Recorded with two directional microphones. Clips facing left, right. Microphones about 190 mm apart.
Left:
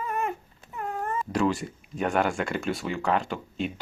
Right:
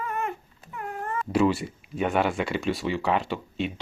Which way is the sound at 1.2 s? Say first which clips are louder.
Right 4 dB; 5° right (ahead or behind).